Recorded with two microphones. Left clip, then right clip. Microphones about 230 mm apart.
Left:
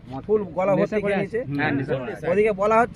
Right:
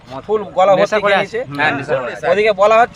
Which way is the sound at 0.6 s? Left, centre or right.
Centre.